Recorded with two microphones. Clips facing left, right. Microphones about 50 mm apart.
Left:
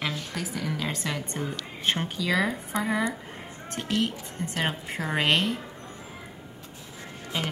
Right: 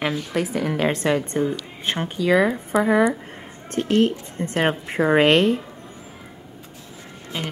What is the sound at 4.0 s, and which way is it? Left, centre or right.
A woman's voice, right.